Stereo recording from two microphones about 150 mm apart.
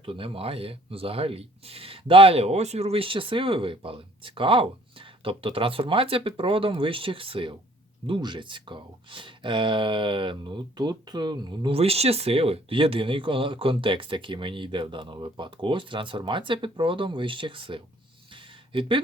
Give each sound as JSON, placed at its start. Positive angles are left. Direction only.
{"t": 0.0, "sound": "speech", "side_deg": -35}
{"t": 11.8, "sound": "speech", "side_deg": -45}